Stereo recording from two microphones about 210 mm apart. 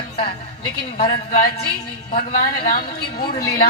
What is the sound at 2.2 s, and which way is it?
A woman's voice, 45° left (ahead or behind).